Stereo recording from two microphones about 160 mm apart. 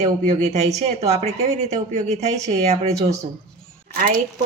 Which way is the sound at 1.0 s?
40° right (ahead or behind).